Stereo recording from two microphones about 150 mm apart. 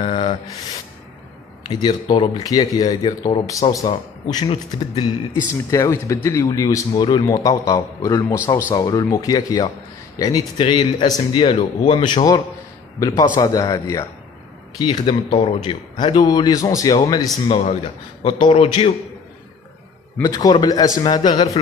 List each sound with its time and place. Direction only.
0.0 s rub: 35° left (ahead or behind)
1.7 s speech: 30° left (ahead or behind)
17.5 s speech: 40° left (ahead or behind)
20.2 s speech: 25° left (ahead or behind)